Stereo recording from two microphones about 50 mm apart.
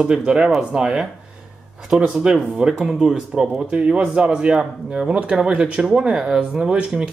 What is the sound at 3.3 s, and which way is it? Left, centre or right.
Speech, centre.